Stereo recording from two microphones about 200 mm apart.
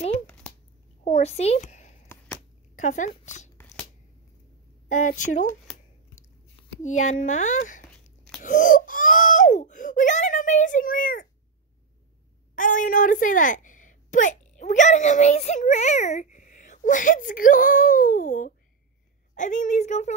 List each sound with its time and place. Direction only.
1.0 s a sound: 35° left (ahead or behind)
2.7 s speech: 40° left (ahead or behind)
4.8 s speech: 40° left (ahead or behind)
6.8 s speech: 35° left (ahead or behind)
8.4 s crying: 40° left (ahead or behind)
12.5 s a woman's voice: 40° left (ahead or behind)